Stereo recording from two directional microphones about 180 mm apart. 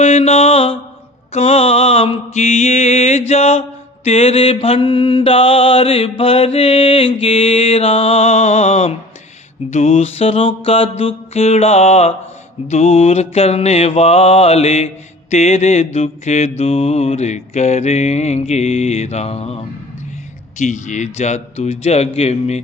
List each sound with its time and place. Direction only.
0.0 s mantra: 35° left (ahead or behind)